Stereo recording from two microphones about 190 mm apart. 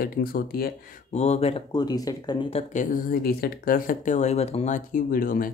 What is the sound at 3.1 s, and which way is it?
Speech, 55° left (ahead or behind).